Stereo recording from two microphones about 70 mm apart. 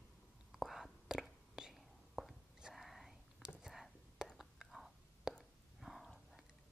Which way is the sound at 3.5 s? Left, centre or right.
Centre.